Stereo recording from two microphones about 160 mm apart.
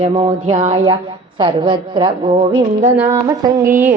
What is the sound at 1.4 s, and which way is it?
A woman's voice, 30° right (ahead or behind).